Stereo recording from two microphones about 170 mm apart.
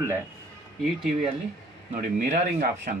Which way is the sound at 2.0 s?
50° right (ahead or behind).